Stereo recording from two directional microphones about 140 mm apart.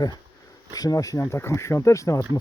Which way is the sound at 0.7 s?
25° left (ahead or behind).